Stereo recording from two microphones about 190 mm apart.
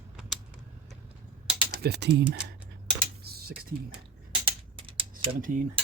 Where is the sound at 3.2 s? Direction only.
55° right (ahead or behind).